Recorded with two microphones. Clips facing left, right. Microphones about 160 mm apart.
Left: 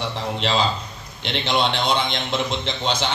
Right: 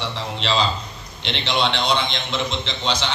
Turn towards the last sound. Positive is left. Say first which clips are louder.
# left 1 dB
turn(degrees=50)  # may be behind; listen again after turning